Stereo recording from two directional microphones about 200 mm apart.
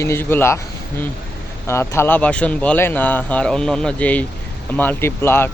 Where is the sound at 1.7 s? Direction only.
15° left (ahead or behind).